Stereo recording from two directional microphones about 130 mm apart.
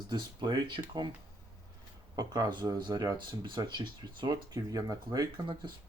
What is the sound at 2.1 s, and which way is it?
Speech, 30° right (ahead or behind).